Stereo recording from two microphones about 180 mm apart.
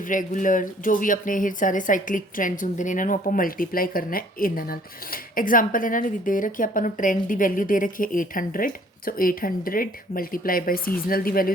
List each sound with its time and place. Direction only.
0.0 s speech: 45° left (ahead or behind)